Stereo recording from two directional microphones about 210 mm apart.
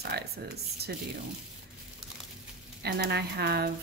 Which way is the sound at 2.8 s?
50° right (ahead or behind).